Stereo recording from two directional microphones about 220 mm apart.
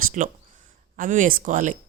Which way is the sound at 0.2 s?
35° right (ahead or behind).